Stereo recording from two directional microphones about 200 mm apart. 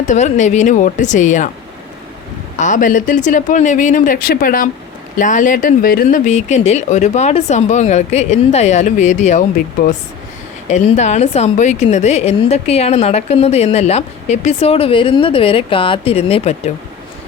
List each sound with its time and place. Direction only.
0.1 s a woman's voice: 35° left (ahead or behind)
2.6 s a woman's voice: 40° left (ahead or behind)
10.7 s a woman's voice: 35° left (ahead or behind)